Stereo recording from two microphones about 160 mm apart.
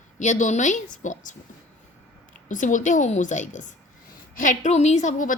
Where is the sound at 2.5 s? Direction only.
50° left (ahead or behind).